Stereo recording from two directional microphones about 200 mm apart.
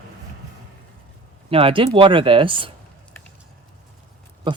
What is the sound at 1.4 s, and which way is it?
Speech, 25° right (ahead or behind).